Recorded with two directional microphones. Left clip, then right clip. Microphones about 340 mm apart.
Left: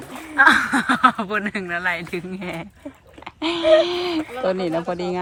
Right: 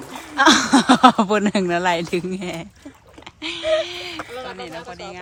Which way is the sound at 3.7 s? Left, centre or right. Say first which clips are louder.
Left 6 dB; centre.